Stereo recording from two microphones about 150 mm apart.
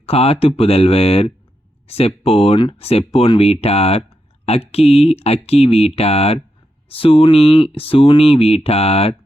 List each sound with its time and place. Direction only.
0.0 s speech: 40° left (ahead or behind)